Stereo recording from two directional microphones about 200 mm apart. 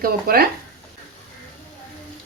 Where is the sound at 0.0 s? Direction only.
50° right (ahead or behind).